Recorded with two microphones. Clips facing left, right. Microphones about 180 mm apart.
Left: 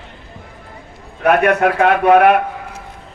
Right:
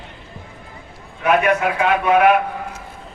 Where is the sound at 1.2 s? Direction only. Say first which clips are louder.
Left 4 dB; 55° left (ahead or behind).